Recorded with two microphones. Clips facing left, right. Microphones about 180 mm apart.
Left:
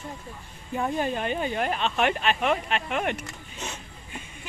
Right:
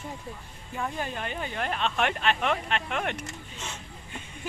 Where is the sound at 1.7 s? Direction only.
5° left (ahead or behind).